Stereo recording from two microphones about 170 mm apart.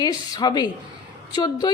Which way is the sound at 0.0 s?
25° left (ahead or behind).